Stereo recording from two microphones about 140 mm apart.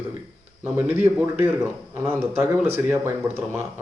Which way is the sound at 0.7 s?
10° right (ahead or behind).